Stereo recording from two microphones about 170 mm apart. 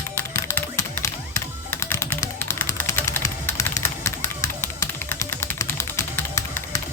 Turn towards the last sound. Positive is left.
turn(degrees=15)  # may be behind; listen again after turning